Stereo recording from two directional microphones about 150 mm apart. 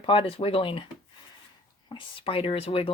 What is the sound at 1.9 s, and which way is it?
Speech, 40° left (ahead or behind).